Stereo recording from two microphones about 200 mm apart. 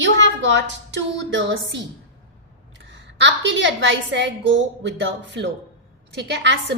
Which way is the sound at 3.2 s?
65° right (ahead or behind).